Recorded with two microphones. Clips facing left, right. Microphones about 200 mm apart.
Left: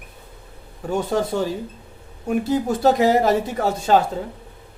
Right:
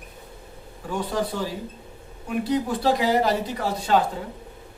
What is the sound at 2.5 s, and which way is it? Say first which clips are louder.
Speech: left 4 dB; 45° left (ahead or behind).